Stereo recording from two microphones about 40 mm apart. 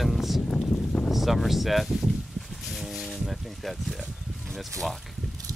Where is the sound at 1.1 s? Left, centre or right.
Centre.